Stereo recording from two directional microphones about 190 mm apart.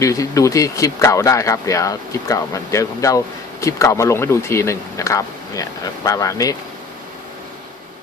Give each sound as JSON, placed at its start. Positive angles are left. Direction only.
{"t": 0.0, "sound": "speech", "side_deg": 15}